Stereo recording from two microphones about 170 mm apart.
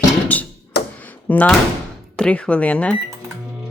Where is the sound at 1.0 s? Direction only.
10° left (ahead or behind).